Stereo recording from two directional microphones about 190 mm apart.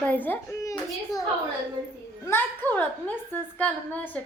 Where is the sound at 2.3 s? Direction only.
10° left (ahead or behind).